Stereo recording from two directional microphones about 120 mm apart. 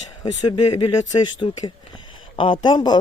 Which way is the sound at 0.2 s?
35° left (ahead or behind).